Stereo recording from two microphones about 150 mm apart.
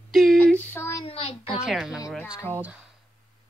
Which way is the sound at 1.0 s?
35° left (ahead or behind).